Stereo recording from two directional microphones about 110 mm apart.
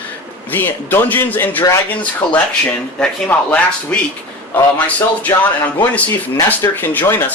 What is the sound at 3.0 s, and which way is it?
Speech, 10° left (ahead or behind).